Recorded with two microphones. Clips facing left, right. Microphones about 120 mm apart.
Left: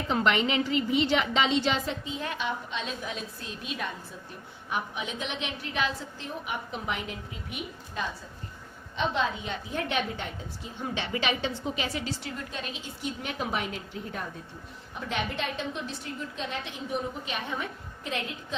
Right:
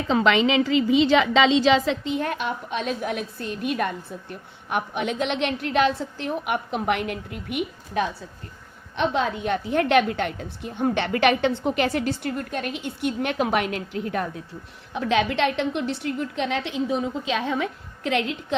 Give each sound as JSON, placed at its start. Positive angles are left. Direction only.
{"t": 0.1, "sound": "a woman's voice", "side_deg": -90}
{"t": 14.9, "sound": "a woman's voice", "side_deg": -90}